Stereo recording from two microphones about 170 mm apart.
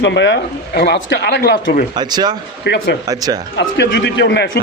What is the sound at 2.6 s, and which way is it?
Speech, 80° left.